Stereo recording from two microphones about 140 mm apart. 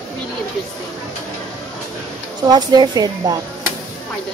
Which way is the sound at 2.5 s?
30° right (ahead or behind).